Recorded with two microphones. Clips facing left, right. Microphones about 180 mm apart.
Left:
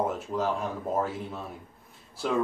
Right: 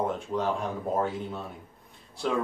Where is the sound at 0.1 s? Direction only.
Centre (ahead or behind).